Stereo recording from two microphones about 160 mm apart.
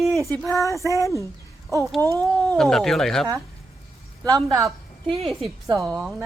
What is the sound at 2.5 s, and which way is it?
Speech, centre (ahead or behind).